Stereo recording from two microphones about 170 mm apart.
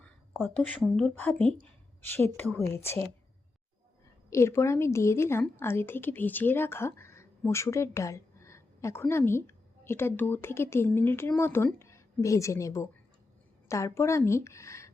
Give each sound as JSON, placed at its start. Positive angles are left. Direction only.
{"t": 0.0, "sound": "a sound", "side_deg": 0}
{"t": 0.5, "sound": "a woman's voice", "side_deg": 10}
{"t": 4.3, "sound": "a woman's voice", "side_deg": 15}